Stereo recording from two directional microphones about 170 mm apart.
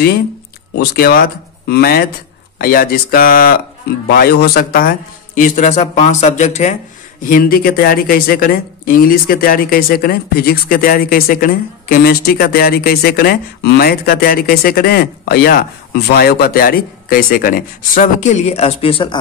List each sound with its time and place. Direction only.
0.7 s speech: 65° left (ahead or behind); by 6.8 s 45° left (ahead or behind)
7.2 s speech: 55° left (ahead or behind); by 19.1 s 30° left (ahead or behind)